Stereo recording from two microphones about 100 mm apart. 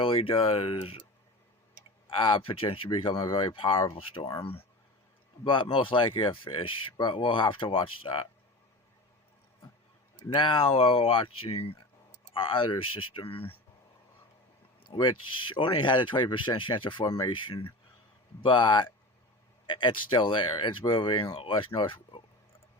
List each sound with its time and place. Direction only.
0.0 s speech: 60° left (ahead or behind)
2.0 s speech: 50° left (ahead or behind)
5.4 s speech: 55° left (ahead or behind)
10.2 s speech: 55° left (ahead or behind); by 11.8 s 75° left (ahead or behind)
12.3 s speech: 60° left (ahead or behind)
14.8 s speech: 55° left (ahead or behind)
21.8 s a sound: 60° left (ahead or behind)